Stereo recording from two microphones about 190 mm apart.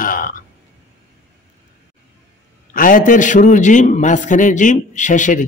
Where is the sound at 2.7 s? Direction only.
45° left (ahead or behind).